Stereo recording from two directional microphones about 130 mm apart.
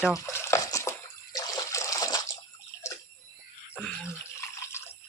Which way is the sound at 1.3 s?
30° left (ahead or behind).